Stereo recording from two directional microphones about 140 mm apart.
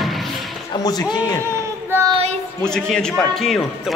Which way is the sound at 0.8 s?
30° left (ahead or behind).